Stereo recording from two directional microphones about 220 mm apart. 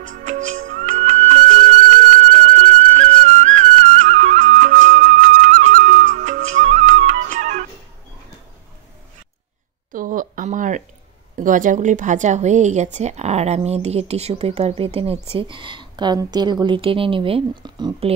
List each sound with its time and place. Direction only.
0.0 s music: 35° right (ahead or behind)
9.9 s a sound: 40° right (ahead or behind)
11.3 s speech: 35° right (ahead or behind); by 18.1 s 20° right (ahead or behind)